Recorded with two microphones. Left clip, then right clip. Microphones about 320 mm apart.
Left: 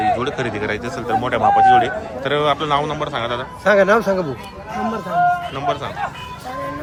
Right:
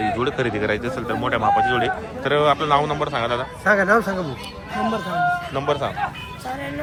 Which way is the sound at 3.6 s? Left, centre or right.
Left.